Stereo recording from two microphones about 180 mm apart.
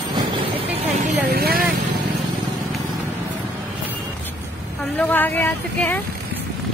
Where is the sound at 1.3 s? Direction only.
60° right (ahead or behind).